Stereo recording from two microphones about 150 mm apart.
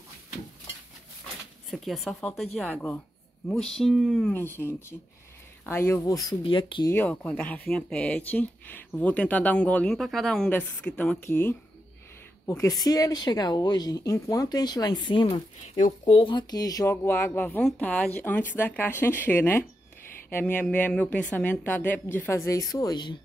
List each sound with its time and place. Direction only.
1.7 s speech: centre (ahead or behind)
4.3 s a woman's voice: 15° left (ahead or behind)
6.4 s speech: 35° left (ahead or behind)
6.9 s a woman's voice: 10° left (ahead or behind); by 23.1 s 25° left (ahead or behind)